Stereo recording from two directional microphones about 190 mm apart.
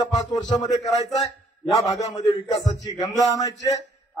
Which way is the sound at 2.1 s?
20° left (ahead or behind).